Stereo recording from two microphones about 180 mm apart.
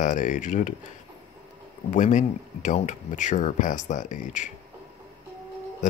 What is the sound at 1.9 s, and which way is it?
Speech, 45° left (ahead or behind).